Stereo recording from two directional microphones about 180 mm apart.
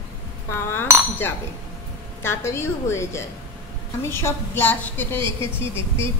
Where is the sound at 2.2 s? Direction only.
15° left (ahead or behind).